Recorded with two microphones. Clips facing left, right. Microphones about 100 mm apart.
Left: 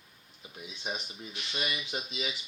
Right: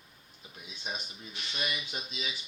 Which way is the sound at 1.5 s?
30° left (ahead or behind).